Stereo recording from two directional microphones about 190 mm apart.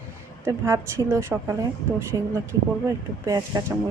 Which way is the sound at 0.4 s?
15° right (ahead or behind).